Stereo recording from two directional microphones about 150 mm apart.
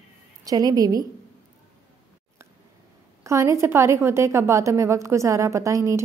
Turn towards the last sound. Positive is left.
turn(degrees=-20)  # may be behind; listen again after turning